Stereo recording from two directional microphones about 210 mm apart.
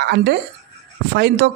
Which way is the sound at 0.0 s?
50° right (ahead or behind).